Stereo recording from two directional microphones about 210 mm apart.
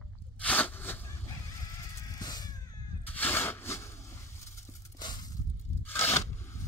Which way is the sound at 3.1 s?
10° left (ahead or behind).